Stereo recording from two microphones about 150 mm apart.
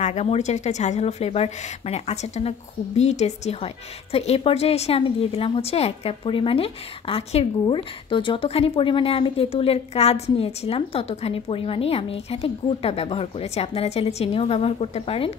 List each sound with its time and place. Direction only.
0.0 s a woman's voice: 45° left (ahead or behind)